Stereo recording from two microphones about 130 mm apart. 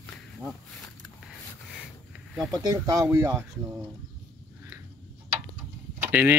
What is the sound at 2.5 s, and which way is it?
Speech, 30° right (ahead or behind).